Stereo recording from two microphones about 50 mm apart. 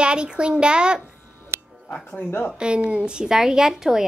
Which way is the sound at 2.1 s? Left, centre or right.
Left.